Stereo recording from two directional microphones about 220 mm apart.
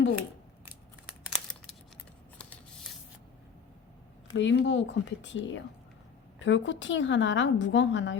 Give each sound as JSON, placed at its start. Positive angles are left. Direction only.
{"t": 1.2, "sound": "crumpling", "side_deg": 0}
{"t": 2.4, "sound": "a sound", "side_deg": 5}
{"t": 4.4, "sound": "speech", "side_deg": 55}